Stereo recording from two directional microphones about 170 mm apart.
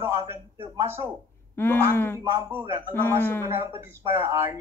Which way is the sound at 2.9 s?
10° left (ahead or behind).